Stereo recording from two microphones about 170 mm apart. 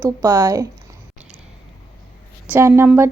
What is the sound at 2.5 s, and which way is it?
Speech, 15° right (ahead or behind).